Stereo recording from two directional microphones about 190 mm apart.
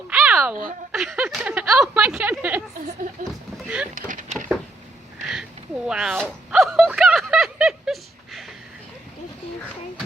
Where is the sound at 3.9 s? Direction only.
45° right (ahead or behind).